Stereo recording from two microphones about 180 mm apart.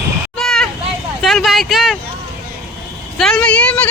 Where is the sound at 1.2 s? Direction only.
Centre (ahead or behind).